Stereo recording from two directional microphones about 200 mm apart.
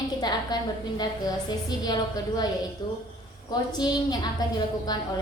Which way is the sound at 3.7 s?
20° left (ahead or behind).